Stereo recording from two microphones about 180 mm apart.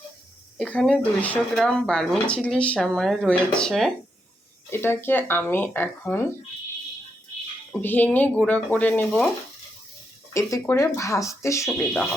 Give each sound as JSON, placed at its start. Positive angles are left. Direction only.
{"t": 0.5, "sound": "speech", "side_deg": 5}
{"t": 7.7, "sound": "speech", "side_deg": 10}
{"t": 10.3, "sound": "speech", "side_deg": 15}